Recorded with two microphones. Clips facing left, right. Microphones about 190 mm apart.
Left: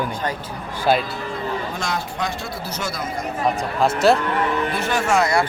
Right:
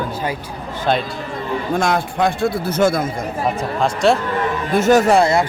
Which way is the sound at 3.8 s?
Centre (ahead or behind).